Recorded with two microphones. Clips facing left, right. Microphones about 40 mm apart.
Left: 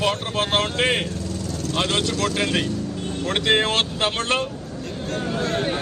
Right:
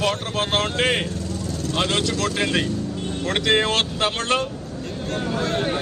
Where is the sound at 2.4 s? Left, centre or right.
Right.